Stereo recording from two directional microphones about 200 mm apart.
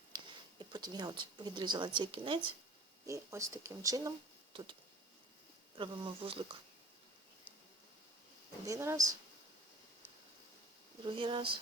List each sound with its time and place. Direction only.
0.1 s a sound: 20° right (ahead or behind)
0.6 s speech: 20° right (ahead or behind)
4.5 s a sound: 25° right (ahead or behind)
5.7 s speech: 25° right (ahead or behind)
8.6 s speech: 15° right (ahead or behind)
11.0 s speech: 25° right (ahead or behind)